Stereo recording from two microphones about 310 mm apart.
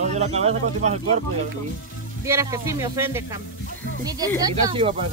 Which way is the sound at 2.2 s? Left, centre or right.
Centre.